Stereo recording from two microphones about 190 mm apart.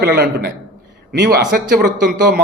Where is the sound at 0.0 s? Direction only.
55° right (ahead or behind).